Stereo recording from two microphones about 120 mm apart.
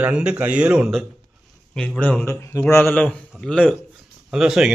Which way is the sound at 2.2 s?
25° left (ahead or behind).